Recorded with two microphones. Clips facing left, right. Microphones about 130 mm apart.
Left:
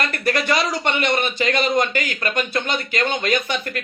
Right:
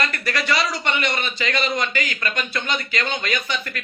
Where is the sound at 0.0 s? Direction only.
50° left (ahead or behind).